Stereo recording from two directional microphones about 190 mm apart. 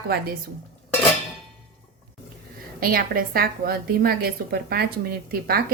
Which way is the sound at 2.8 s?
50° right (ahead or behind).